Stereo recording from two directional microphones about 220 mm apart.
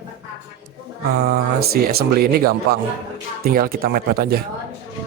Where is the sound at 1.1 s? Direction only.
45° right (ahead or behind).